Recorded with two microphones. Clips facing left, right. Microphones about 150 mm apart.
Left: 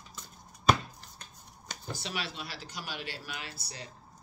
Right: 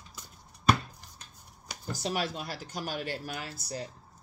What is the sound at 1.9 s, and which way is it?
Speech, 45° right (ahead or behind).